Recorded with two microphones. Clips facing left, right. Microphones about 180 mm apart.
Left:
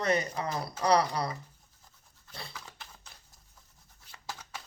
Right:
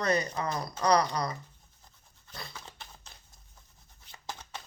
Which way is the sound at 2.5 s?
25° right (ahead or behind).